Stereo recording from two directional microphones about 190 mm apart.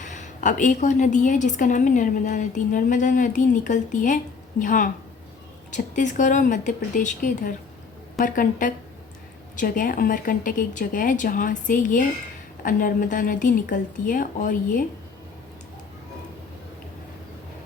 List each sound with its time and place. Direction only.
0.0 s a woman's voice: 40° left (ahead or behind)